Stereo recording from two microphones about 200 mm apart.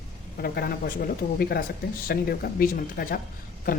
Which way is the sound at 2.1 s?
50° left (ahead or behind).